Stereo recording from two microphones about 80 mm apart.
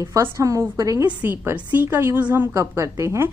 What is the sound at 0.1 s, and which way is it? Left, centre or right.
Speech, right.